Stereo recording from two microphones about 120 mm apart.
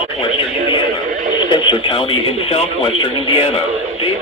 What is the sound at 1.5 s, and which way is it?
Speech, 40° left (ahead or behind).